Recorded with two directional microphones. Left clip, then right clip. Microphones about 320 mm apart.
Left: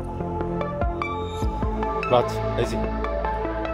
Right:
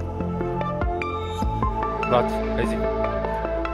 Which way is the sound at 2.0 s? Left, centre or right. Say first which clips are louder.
Left 1 dB; centre.